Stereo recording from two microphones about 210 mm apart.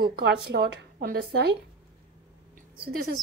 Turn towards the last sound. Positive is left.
turn(degrees=-45)  # may be behind; listen again after turning